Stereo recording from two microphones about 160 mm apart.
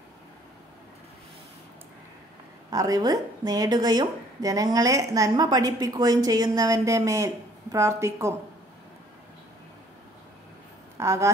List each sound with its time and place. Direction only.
2.7 s a woman's voice: 20° right (ahead or behind)
11.0 s speech: 20° right (ahead or behind)